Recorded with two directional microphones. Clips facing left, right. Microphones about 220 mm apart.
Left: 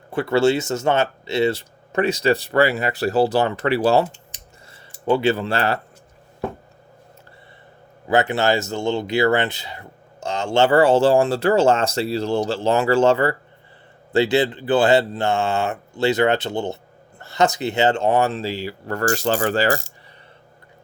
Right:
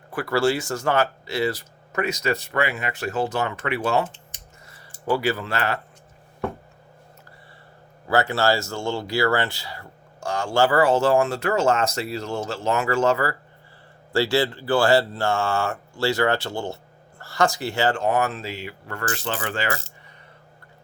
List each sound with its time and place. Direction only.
0.1 s speech: 25° left (ahead or behind)
8.0 s speech: 20° left (ahead or behind); by 19.8 s 35° left (ahead or behind)